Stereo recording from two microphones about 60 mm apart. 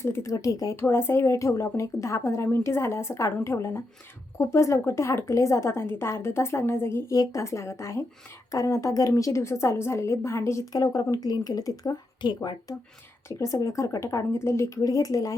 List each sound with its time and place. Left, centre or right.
0.0 s a woman's voice: left
0.3 s speech: left
0.7 s a woman's voice: left
7.1 s speech: left
7.4 s a woman's voice: left
10.7 s speech: left
13.2 s a woman's voice: left
14.8 s speech: left